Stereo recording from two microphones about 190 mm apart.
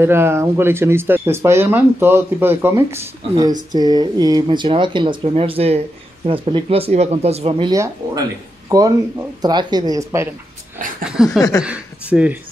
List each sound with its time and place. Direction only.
0.0 s speech: 10° right (ahead or behind); by 7.7 s 30° right (ahead or behind)
7.7 s speech: 15° right (ahead or behind)
11.2 s a sound: 5° right (ahead or behind)
11.6 s speech: 5° right (ahead or behind)